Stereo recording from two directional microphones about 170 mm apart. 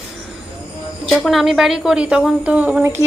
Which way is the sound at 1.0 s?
Centre (ahead or behind).